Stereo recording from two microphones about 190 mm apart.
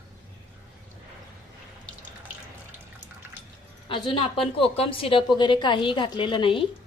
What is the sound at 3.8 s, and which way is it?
A woman's voice, 25° left (ahead or behind).